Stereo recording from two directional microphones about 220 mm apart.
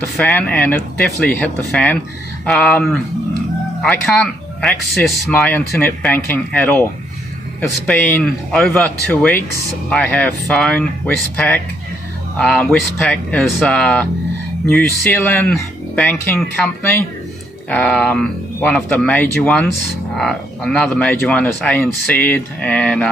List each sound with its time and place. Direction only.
0.2 s speech: 5° left (ahead or behind)